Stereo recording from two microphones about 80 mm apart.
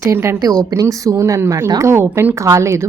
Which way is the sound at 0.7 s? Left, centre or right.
Right.